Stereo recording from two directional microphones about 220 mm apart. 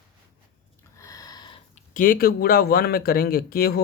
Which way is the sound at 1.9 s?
40° left (ahead or behind).